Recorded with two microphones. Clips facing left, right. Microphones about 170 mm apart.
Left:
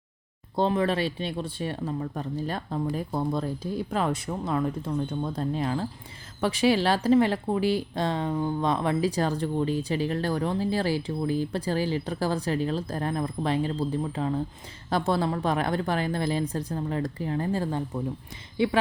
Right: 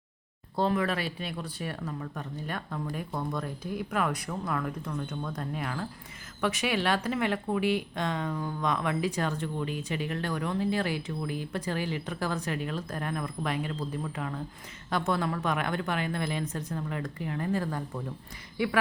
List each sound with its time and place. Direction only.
0.5 s a woman's voice: 25° left (ahead or behind)